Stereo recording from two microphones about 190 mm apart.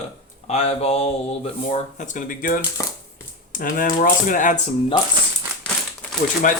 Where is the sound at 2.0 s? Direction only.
45° left (ahead or behind).